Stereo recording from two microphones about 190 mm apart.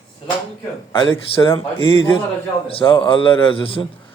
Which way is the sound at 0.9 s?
25° left (ahead or behind).